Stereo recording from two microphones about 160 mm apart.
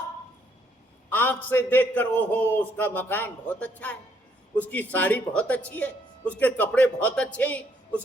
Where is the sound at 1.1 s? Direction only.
10° left (ahead or behind).